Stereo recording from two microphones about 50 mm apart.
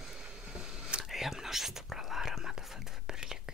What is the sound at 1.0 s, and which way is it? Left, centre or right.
Whispering, centre.